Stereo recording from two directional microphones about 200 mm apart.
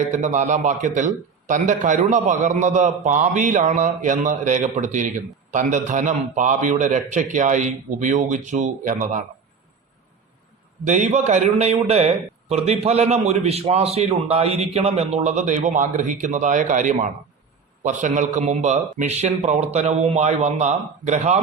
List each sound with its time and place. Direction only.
0.1 s a man's voice: 40° right (ahead or behind)
10.8 s a man's voice: 35° right (ahead or behind)